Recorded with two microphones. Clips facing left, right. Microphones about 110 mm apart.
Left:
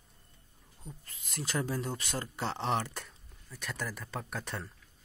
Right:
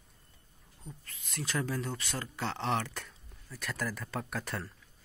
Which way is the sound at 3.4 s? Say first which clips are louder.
Right 2 dB; centre (ahead or behind).